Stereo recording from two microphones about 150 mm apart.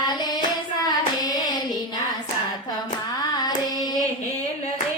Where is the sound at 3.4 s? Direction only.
25° left (ahead or behind).